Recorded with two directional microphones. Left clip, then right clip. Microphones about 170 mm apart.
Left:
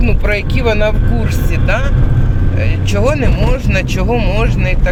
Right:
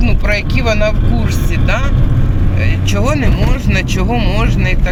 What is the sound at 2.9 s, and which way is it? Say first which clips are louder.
Speech: left 2 dB; 5° left (ahead or behind).